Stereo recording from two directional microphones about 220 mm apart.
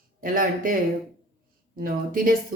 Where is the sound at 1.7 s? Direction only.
40° right (ahead or behind).